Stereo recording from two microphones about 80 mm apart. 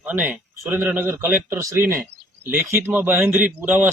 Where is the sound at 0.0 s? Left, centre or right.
Right.